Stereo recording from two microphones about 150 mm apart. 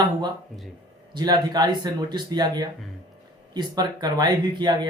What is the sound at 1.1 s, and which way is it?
Speech, 30° right (ahead or behind).